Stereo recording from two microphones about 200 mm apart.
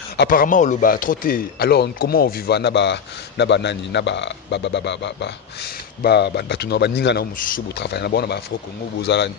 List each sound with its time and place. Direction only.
0.2 s a man's voice: 45° left (ahead or behind)